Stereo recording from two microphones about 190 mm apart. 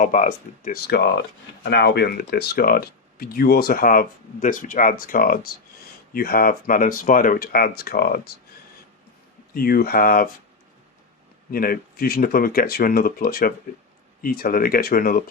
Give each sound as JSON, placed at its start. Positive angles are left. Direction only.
{"t": 0.0, "sound": "speech", "side_deg": 45}
{"t": 9.6, "sound": "speech", "side_deg": 50}
{"t": 11.5, "sound": "speech", "side_deg": 50}